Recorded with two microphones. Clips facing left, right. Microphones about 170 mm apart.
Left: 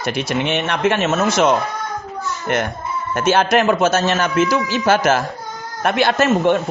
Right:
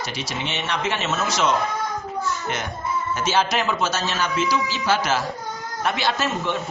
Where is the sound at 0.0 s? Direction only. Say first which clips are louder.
Left 9 dB; 55° left (ahead or behind).